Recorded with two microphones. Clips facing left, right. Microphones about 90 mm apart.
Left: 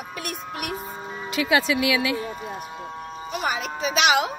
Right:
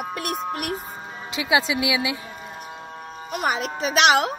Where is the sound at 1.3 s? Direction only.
15° right (ahead or behind).